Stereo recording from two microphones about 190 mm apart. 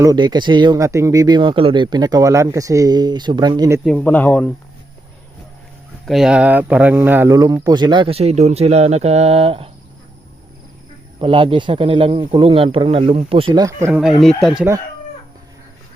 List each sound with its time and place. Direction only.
0.0 s speech: 20° right (ahead or behind)
3.8 s speech: 5° left (ahead or behind)
6.1 s speech: 5° right (ahead or behind); by 9.6 s 30° right (ahead or behind)
11.2 s speech: 30° right (ahead or behind)
13.8 s speech: 5° right (ahead or behind)